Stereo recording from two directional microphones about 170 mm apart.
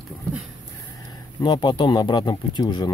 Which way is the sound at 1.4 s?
25° left (ahead or behind).